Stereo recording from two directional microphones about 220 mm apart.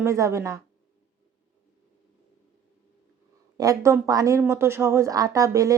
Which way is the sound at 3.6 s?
15° right (ahead or behind).